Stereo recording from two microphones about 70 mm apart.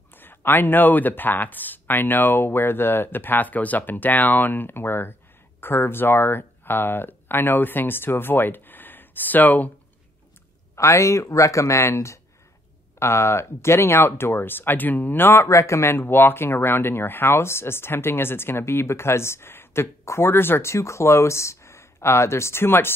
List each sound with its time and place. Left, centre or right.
0.1 s speech: left
10.8 s speech: left